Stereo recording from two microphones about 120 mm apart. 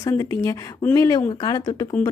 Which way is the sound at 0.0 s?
25° left (ahead or behind).